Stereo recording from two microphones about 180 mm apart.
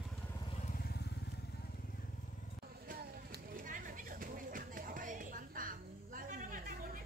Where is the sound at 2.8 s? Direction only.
55° right (ahead or behind).